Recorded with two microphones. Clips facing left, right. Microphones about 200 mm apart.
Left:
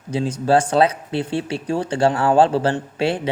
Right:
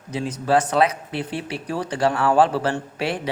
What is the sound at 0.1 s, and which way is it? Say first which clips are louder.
Speech: left 3 dB; 30° left (ahead or behind).